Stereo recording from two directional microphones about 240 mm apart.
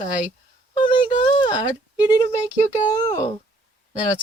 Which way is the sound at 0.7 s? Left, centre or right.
Left.